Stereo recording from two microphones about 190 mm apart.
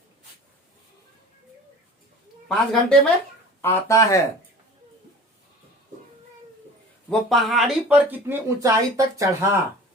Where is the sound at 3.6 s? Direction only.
15° left (ahead or behind).